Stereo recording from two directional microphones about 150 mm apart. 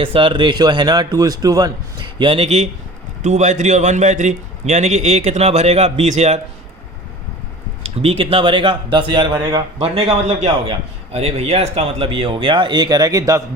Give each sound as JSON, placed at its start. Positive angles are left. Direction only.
{"t": 0.0, "sound": "a man's voice", "side_deg": -35}
{"t": 8.0, "sound": "a man's voice", "side_deg": -40}